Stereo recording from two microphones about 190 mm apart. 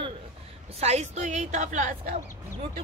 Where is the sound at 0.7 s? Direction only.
35° right (ahead or behind).